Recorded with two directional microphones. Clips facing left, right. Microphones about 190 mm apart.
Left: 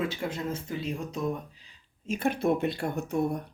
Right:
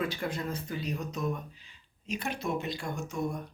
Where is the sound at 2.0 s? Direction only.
50° left (ahead or behind).